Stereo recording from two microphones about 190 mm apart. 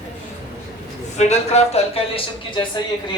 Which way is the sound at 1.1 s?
35° left (ahead or behind).